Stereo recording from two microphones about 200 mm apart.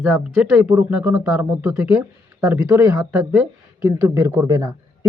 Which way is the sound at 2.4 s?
15° right (ahead or behind).